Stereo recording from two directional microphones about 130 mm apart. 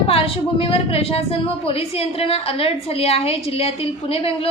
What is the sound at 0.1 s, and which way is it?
A woman's voice, 45° left (ahead or behind).